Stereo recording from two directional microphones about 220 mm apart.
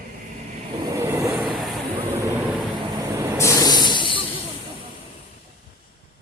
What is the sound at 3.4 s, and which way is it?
Snake, 15° left (ahead or behind).